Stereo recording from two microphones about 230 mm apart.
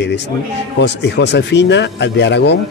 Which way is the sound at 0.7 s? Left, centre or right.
Left.